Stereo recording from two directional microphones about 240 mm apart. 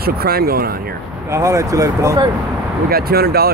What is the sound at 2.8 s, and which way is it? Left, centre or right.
Speech, right.